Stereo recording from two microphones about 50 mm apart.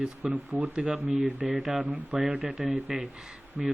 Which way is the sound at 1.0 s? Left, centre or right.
Centre.